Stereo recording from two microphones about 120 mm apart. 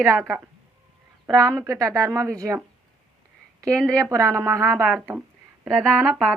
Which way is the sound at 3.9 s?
25° right (ahead or behind).